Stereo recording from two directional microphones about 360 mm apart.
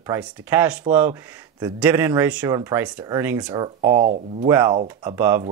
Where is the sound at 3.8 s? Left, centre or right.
Right.